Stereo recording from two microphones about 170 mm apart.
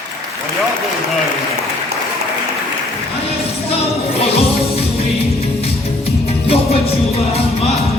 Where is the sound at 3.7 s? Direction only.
35° left (ahead or behind).